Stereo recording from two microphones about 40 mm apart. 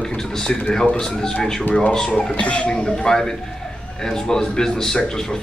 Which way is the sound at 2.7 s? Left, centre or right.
Centre.